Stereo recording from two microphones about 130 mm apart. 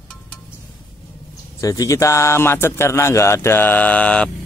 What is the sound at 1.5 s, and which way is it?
Speech, 25° left (ahead or behind).